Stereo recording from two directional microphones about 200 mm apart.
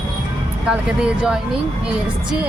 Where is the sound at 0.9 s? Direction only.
5° right (ahead or behind).